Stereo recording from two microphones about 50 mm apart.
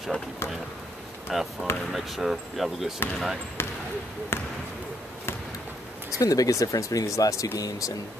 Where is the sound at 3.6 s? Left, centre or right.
Left.